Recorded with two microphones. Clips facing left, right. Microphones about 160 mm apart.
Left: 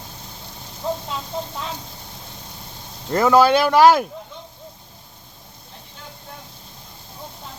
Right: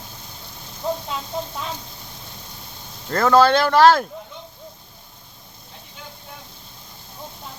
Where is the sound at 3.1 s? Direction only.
15° left (ahead or behind).